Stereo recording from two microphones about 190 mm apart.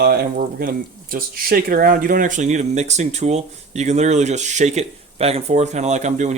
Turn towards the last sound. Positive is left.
turn(degrees=-40)  # may be behind; listen again after turning